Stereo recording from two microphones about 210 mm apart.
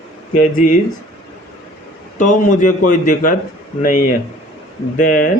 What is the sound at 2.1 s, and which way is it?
Speech, 35° left (ahead or behind).